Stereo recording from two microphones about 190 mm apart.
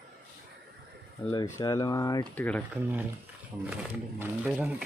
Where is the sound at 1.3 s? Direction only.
20° left (ahead or behind).